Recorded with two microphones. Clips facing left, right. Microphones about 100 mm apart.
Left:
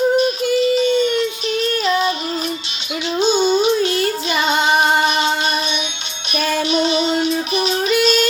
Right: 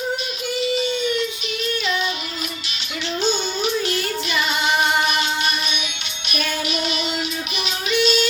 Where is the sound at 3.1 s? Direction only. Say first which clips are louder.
Left 8 dB; 20° left (ahead or behind).